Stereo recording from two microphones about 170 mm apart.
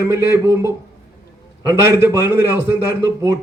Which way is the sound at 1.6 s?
15° right (ahead or behind).